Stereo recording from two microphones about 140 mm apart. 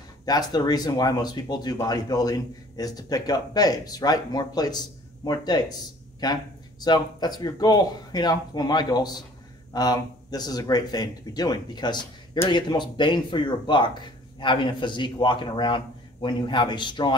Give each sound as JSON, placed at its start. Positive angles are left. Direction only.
{"t": 0.2, "sound": "speech", "side_deg": 30}